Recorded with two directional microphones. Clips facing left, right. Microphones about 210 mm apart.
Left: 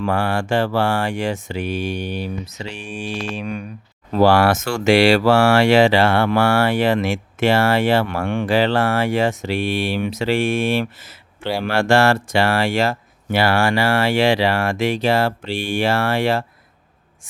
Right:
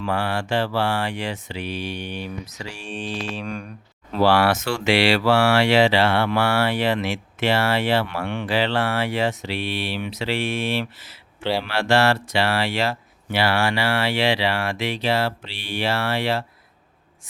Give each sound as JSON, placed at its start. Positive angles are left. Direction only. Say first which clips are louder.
{"t": 0.0, "sound": "speech", "louder": "left 4 dB", "side_deg": 50}
{"t": 2.6, "sound": "mantra", "louder": "left 4 dB", "side_deg": 20}
{"t": 3.3, "sound": "speech", "louder": "left 3 dB", "side_deg": 5}
{"t": 4.1, "sound": "speech", "louder": "left 4 dB", "side_deg": 45}